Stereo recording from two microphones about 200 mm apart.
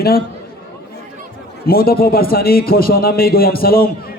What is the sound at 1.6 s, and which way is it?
A man's voice, 50° left (ahead or behind).